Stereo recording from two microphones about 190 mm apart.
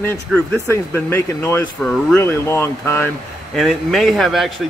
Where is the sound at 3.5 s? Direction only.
Centre (ahead or behind).